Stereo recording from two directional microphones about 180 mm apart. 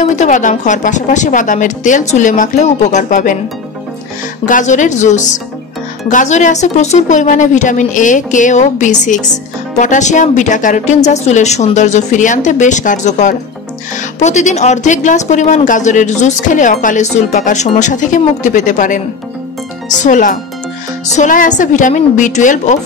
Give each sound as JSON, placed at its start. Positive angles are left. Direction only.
{"t": 0.1, "sound": "speech", "side_deg": 40}
{"t": 4.5, "sound": "speech", "side_deg": 45}
{"t": 20.0, "sound": "speech", "side_deg": 45}